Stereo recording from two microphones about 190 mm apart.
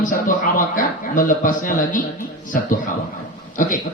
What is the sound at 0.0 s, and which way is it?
A man's voice, 45° left (ahead or behind).